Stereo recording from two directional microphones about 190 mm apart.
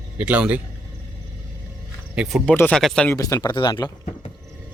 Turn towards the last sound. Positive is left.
turn(degrees=25)  # may be behind; listen again after turning